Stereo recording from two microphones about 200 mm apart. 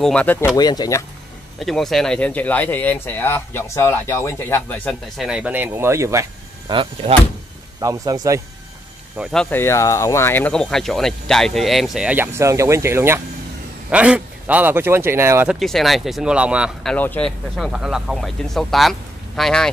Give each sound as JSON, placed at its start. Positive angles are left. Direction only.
{"t": 0.0, "sound": "speech", "side_deg": 5}
{"t": 0.6, "sound": "speech", "side_deg": 20}
{"t": 1.6, "sound": "speech", "side_deg": 0}
{"t": 6.7, "sound": "speech", "side_deg": -25}
{"t": 9.1, "sound": "speech", "side_deg": 0}
{"t": 15.6, "sound": "speech", "side_deg": 0}
{"t": 16.9, "sound": "speech", "side_deg": 10}